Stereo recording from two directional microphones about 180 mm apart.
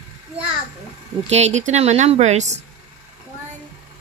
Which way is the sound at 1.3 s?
40° right (ahead or behind).